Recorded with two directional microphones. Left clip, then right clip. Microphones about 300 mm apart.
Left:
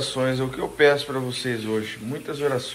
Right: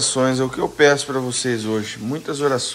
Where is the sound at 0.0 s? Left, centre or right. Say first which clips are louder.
Right 5 dB; right.